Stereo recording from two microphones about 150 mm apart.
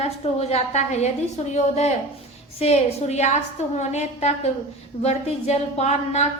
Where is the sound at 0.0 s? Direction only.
45° left (ahead or behind).